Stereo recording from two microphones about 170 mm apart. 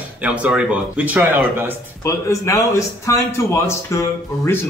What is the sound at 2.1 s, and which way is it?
Speech, 15° left (ahead or behind).